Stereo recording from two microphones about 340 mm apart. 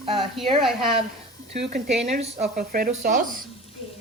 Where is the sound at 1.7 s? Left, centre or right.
Right.